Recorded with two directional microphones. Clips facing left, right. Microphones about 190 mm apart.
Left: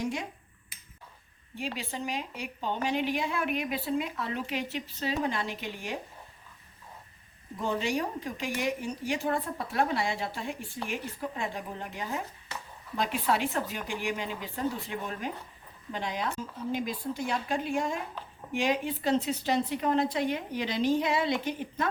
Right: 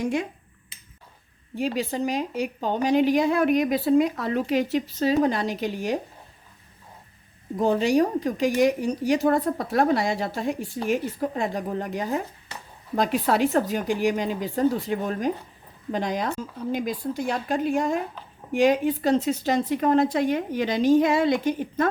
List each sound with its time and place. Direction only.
1.5 s speech: 40° right (ahead or behind)
7.6 s a woman's voice: 40° right (ahead or behind)